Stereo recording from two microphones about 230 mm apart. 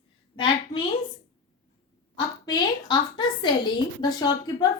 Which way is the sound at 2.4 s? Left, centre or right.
Centre.